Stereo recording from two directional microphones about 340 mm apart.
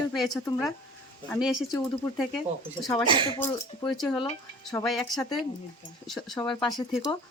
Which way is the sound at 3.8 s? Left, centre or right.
Centre.